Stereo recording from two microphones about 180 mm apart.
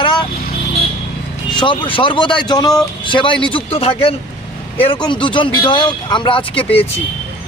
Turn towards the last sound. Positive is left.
turn(degrees=30)  # may be behind; listen again after turning